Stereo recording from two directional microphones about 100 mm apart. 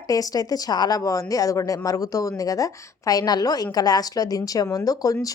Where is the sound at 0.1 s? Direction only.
35° left (ahead or behind).